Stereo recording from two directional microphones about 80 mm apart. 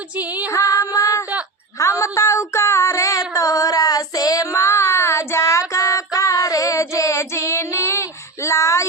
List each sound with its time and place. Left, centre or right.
0.2 s music: centre
0.5 s music: left
1.8 s child singing: left
8.4 s a sound: left